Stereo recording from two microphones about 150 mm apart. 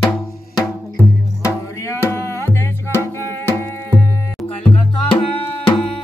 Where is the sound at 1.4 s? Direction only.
20° left (ahead or behind).